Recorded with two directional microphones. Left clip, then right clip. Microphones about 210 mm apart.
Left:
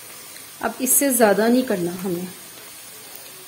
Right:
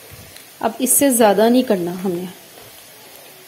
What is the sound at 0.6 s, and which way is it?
A woman's voice, 20° right (ahead or behind).